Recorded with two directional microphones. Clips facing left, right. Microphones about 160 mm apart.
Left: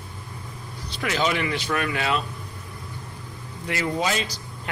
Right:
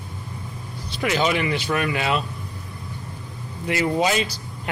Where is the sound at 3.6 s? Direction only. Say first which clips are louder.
Right 4 dB; 10° right (ahead or behind).